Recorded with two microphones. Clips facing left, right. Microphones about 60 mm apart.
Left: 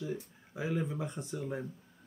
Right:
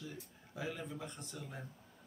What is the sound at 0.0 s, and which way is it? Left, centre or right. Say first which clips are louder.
Speech: left 10 dB; centre.